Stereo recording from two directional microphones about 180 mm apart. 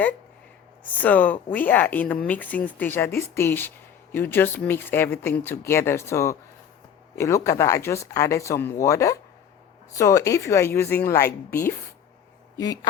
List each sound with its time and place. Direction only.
0.9 s speech: 10° left (ahead or behind)
12.5 s speech: 20° left (ahead or behind)